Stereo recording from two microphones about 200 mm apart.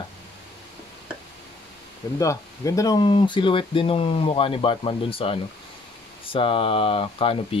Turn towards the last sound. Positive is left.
turn(degrees=25)  # may be behind; listen again after turning